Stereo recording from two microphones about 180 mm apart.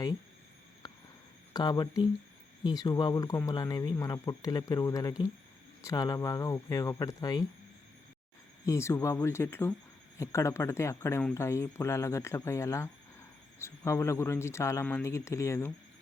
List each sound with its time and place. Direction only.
0.8 s a sound: 20° left (ahead or behind)
1.5 s speech: 20° left (ahead or behind)
8.6 s speech: 15° left (ahead or behind)